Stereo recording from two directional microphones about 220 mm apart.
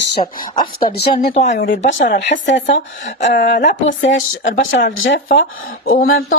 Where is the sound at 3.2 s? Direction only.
40° left (ahead or behind).